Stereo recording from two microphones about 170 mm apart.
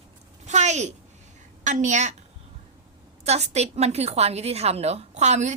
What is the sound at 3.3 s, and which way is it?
A woman's voice, 40° right (ahead or behind).